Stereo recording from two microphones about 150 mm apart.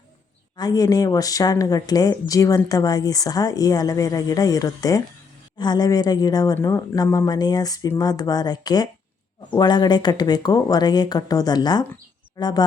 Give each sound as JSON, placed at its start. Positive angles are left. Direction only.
{"t": 0.5, "sound": "speech", "side_deg": 25}